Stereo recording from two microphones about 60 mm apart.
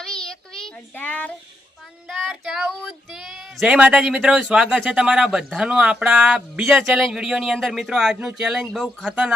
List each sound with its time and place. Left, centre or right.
0.0 s child singing: centre
0.9 s a sound: left
2.0 s child singing: centre
3.8 s speech: centre
6.8 s speech: centre